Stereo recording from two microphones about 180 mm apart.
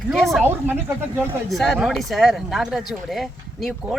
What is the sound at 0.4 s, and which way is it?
Speech, 10° right (ahead or behind).